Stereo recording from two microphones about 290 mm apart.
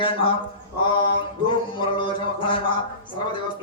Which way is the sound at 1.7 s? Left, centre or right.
Centre.